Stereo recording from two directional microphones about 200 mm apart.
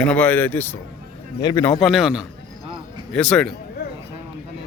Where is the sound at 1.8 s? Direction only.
Centre (ahead or behind).